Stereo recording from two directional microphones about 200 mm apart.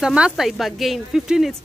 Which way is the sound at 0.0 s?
5° right (ahead or behind).